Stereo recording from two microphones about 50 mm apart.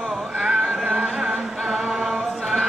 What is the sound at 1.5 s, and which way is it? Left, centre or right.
A capella, centre.